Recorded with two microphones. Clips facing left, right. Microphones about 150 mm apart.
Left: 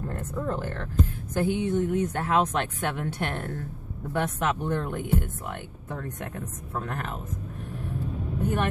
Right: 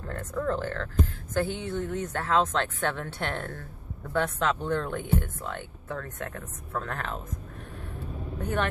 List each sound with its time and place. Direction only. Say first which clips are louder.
0.3 s speech: right 3 dB; 15° left (ahead or behind)
8.4 s speech: left 2 dB; 10° left (ahead or behind)